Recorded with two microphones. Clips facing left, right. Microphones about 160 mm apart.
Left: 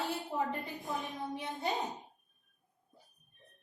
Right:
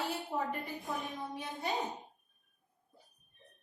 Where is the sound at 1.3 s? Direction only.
20° left (ahead or behind).